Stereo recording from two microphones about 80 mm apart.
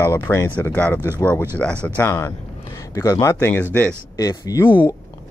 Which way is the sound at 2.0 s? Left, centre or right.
Left.